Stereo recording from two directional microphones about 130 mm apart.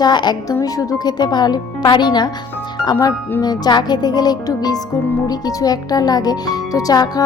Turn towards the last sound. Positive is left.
turn(degrees=30)  # may be behind; listen again after turning